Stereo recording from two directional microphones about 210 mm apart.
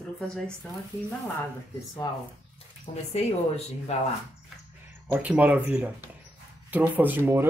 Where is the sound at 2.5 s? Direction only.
30° left (ahead or behind).